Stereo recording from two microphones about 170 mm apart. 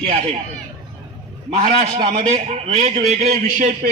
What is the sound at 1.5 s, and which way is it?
A man's voice, 35° right (ahead or behind).